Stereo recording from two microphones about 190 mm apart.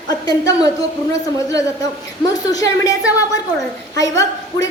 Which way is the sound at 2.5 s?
20° left (ahead or behind).